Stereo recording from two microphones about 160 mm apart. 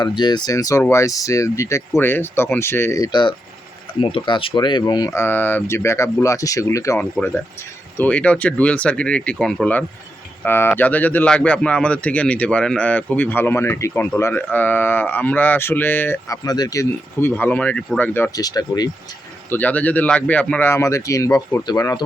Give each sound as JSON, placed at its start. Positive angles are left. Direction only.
{"t": 0.0, "sound": "speech", "side_deg": 25}
{"t": 7.0, "sound": "speech", "side_deg": 10}
{"t": 19.5, "sound": "speech", "side_deg": 10}